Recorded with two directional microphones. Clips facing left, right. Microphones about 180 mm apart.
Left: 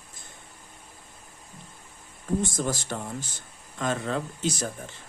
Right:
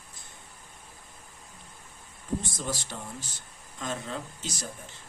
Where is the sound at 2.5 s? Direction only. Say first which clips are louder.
Left 6 dB; 50° left (ahead or behind).